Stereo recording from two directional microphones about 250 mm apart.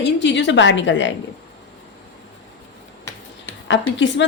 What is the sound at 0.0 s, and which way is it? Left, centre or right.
A woman's voice, left.